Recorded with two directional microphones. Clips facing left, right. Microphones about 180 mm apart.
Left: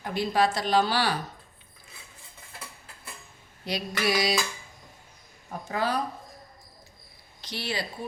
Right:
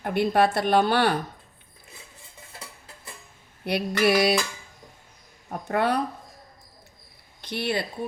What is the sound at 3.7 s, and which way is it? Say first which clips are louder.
Speech: right 6 dB; 60° right (ahead or behind).